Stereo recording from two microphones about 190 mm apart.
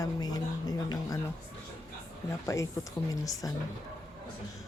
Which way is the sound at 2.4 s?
15° left (ahead or behind).